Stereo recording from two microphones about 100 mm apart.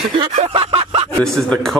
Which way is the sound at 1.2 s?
5° left (ahead or behind).